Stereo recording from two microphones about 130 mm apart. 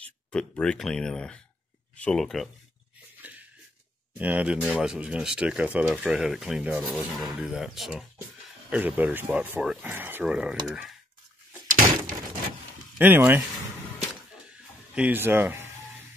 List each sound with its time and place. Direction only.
0.0 s speech: 5° left (ahead or behind)
3.2 s a sound: 10° right (ahead or behind)
4.2 s speech: 10° right (ahead or behind)
6.7 s speech: 15° right (ahead or behind)
7.1 s speech: centre (ahead or behind)
11.6 s door: 90° right
12.9 s speech: 15° right (ahead or behind)
15.0 s a sound: 15° right (ahead or behind)